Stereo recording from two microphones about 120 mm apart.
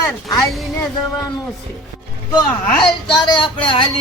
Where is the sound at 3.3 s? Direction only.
45° left (ahead or behind).